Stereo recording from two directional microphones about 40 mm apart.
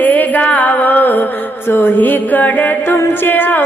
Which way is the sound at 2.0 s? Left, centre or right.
Left.